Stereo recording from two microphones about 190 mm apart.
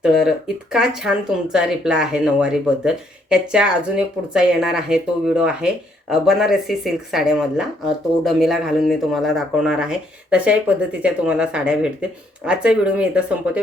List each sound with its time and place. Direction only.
0.0 s speech: centre (ahead or behind)